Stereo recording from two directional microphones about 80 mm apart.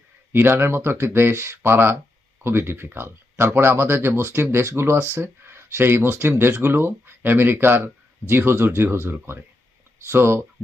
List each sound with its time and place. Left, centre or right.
0.3 s speech: right